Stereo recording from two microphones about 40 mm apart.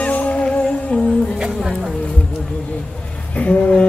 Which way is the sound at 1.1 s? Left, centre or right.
Centre.